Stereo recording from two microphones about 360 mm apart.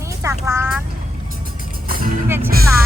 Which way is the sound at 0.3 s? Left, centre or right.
Centre.